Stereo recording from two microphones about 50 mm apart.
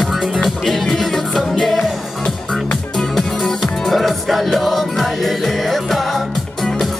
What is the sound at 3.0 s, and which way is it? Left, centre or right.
Music, centre.